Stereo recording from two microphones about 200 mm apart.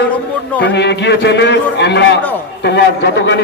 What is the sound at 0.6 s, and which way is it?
A man's voice, 60° left (ahead or behind).